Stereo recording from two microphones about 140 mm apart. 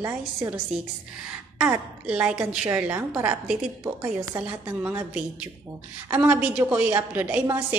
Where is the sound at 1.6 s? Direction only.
10° right (ahead or behind).